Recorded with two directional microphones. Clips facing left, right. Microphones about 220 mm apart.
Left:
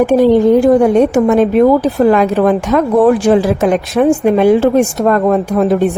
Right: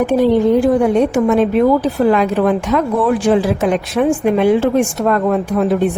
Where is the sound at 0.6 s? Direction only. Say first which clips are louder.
Left 4 dB; 40° left (ahead or behind).